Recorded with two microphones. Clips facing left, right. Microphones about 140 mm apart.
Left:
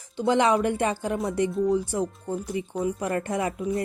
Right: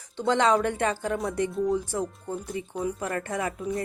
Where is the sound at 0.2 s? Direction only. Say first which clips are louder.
Left 1 dB; 10° left (ahead or behind).